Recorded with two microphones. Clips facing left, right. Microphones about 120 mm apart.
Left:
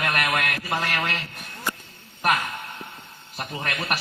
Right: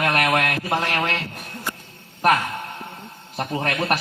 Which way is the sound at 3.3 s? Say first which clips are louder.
Right 6 dB; 45° right (ahead or behind).